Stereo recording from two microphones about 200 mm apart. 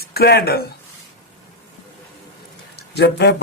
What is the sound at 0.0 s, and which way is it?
Speech, 50° left (ahead or behind).